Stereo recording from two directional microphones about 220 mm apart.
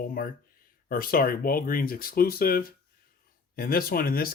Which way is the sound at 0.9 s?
40° left (ahead or behind).